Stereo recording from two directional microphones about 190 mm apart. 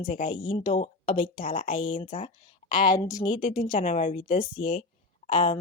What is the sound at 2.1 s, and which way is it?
Speech, 40° left (ahead or behind).